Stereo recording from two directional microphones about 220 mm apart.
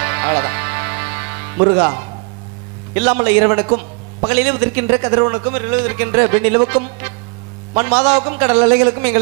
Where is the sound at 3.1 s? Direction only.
20° right (ahead or behind).